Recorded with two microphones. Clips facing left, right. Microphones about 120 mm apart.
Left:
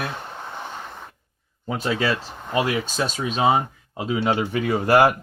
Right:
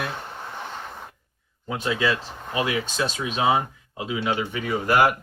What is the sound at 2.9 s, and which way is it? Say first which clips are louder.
Speech: left 2 dB; 35° left (ahead or behind).